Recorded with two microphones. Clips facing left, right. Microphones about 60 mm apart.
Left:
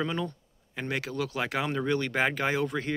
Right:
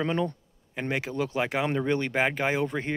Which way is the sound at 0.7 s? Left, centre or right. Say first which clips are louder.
Right 2 dB; centre.